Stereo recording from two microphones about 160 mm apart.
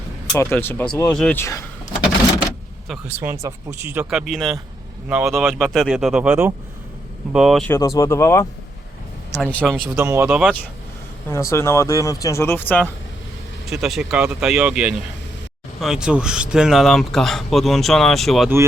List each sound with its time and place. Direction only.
0.3 s speech: 15° left (ahead or behind)
3.2 s speech: 15° right (ahead or behind)
4.1 s speech: centre (ahead or behind)
7.3 s speech: centre (ahead or behind)
7.7 s speech: 20° left (ahead or behind)
9.4 s speech: 5° left (ahead or behind)
9.9 s speech: 15° right (ahead or behind)
11.3 s speech: 15° left (ahead or behind)
13.7 s speech: centre (ahead or behind)